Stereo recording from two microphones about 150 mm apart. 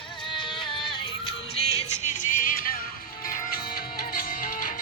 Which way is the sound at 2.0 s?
55° left (ahead or behind).